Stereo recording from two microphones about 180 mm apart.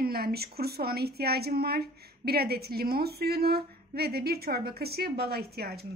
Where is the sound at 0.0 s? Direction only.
60° right (ahead or behind).